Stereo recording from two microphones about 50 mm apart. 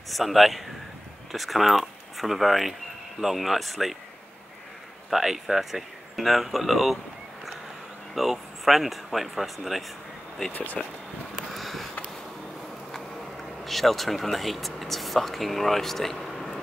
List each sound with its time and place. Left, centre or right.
0.1 s speech: centre
5.1 s speech: centre
8.1 s speech: centre
10.5 s speech: left
11.3 s a sound: centre
13.7 s speech: centre
16.3 s a sound: centre